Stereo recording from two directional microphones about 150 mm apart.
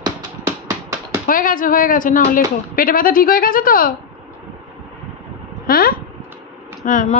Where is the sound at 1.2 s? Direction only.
65° left (ahead or behind).